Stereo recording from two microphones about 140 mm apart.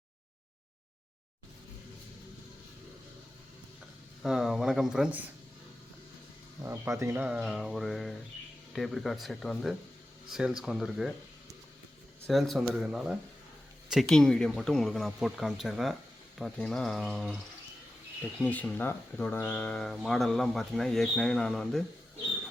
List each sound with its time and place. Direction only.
4.2 s speech: 5° right (ahead or behind)
6.6 s speech: 20° right (ahead or behind)
7.2 s speech: 5° right (ahead or behind)
12.3 s speech: centre (ahead or behind)
18.3 s speech: 10° left (ahead or behind)